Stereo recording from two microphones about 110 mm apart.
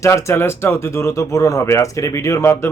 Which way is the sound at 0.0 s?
25° left (ahead or behind).